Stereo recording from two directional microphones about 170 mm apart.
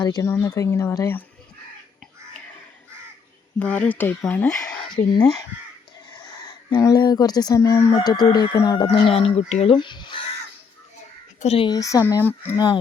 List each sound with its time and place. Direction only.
0.0 s speech: 20° left (ahead or behind)
3.6 s speech: 10° left (ahead or behind)
6.7 s speech: 25° left (ahead or behind)
8.9 s speech: 35° left (ahead or behind)
9.7 s speech: 25° left (ahead or behind)
11.3 s speech: 35° left (ahead or behind)
11.7 s speech: 20° left (ahead or behind)